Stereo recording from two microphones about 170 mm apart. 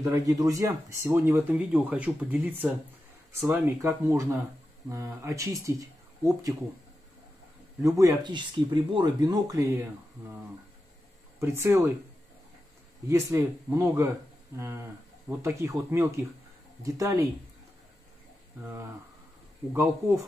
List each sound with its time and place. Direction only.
0.0 s speech: 20° right (ahead or behind)
7.8 s speech: 20° right (ahead or behind)
11.3 s speech: 15° right (ahead or behind)
13.1 s speech: 15° right (ahead or behind)
19.7 s speech: 15° right (ahead or behind)